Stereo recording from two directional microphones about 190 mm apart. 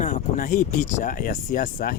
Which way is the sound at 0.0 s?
45° left (ahead or behind).